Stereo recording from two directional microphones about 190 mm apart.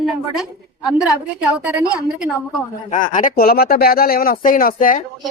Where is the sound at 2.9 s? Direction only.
40° left (ahead or behind).